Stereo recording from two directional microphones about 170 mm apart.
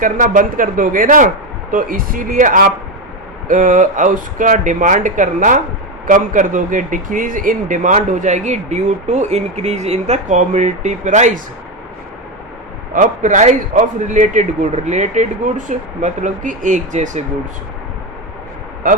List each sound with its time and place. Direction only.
0.0 s a man's voice: 50° right (ahead or behind)
12.9 s a man's voice: 50° right (ahead or behind)